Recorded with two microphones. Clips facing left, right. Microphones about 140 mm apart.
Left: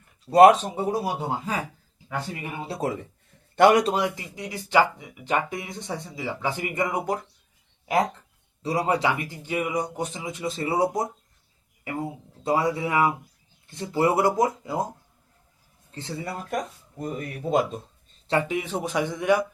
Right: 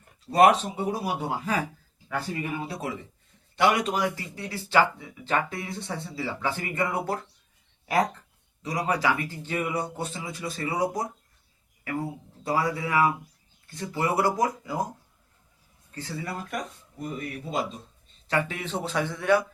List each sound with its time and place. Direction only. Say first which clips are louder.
0.8 s speech: left 2 dB; 25° left (ahead or behind)
2.6 s a man's voice: left 5 dB; 45° left (ahead or behind)
3.9 s speech: left 2 dB; 20° left (ahead or behind)
8.6 s speech: left 3 dB; 30° left (ahead or behind)
15.9 s speech: left 1 dB; 25° left (ahead or behind)
17.0 s speech: left 3 dB; 45° left (ahead or behind)
18.3 s speech: left 3 dB; 25° left (ahead or behind)
18.5 s speech: left 3 dB; 10° left (ahead or behind)